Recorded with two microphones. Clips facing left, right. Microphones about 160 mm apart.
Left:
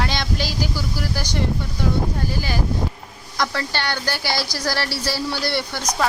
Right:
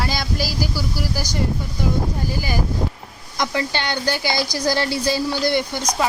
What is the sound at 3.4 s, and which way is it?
A woman's voice, 15° right (ahead or behind).